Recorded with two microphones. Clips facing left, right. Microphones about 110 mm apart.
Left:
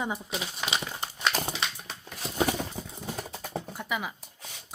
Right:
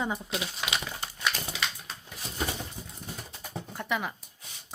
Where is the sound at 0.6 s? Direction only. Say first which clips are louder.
Left 2 dB; 25° left (ahead or behind).